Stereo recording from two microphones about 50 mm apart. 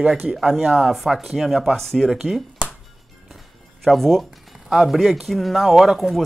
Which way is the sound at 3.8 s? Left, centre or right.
Centre.